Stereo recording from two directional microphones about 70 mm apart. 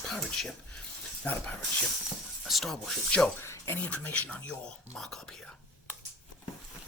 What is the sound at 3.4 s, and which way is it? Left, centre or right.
Speech, left.